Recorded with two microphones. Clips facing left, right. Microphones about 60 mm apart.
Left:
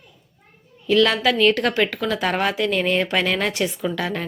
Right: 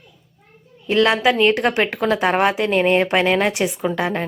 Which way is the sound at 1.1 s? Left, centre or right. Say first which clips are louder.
Right 2 dB; right.